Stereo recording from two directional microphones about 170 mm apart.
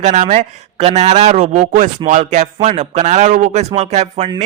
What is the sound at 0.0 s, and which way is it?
A man's voice, 45° right (ahead or behind).